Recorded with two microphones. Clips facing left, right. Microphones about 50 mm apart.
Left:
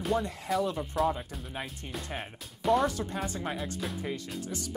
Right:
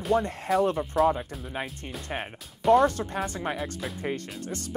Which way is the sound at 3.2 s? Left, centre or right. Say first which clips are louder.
Right 3 dB; right.